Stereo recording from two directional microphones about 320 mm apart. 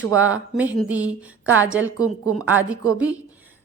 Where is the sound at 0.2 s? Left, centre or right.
Right.